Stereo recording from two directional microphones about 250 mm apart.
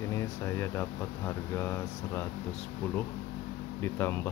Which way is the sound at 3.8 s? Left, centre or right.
Centre.